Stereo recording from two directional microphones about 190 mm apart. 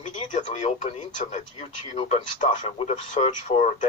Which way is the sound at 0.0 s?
40° left (ahead or behind).